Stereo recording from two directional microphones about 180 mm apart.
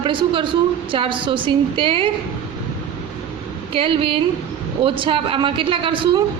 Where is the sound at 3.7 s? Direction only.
30° right (ahead or behind).